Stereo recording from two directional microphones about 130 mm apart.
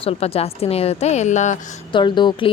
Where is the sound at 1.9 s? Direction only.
35° left (ahead or behind).